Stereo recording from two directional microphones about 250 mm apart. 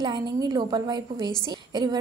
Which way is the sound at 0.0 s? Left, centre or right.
Centre.